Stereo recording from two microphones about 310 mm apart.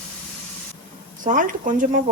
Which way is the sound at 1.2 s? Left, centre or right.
Right.